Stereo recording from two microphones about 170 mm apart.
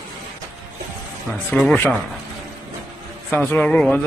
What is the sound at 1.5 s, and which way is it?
Speech, 5° left (ahead or behind).